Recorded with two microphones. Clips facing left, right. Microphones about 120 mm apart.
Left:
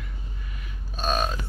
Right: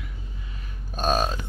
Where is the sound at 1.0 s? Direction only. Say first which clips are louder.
Right 3 dB; 40° right (ahead or behind).